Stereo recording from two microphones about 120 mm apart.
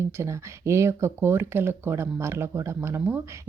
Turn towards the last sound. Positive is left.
turn(degrees=-20)  # may be behind; listen again after turning